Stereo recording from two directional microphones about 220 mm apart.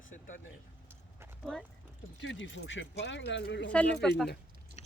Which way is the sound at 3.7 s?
5° left (ahead or behind).